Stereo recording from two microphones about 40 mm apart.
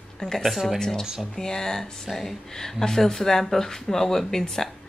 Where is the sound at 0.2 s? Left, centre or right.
Centre.